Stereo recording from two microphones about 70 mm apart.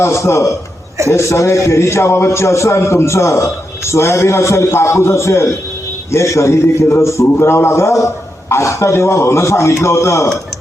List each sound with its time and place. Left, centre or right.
0.0 s a man's voice: left